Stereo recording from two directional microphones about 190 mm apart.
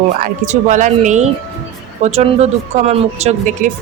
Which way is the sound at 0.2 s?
40° right (ahead or behind).